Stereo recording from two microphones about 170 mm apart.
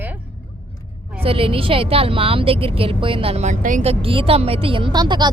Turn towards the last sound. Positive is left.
turn(degrees=-25)  # may be behind; listen again after turning